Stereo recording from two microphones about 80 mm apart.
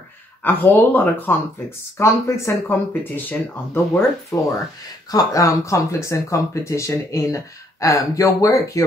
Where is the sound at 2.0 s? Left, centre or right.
Left.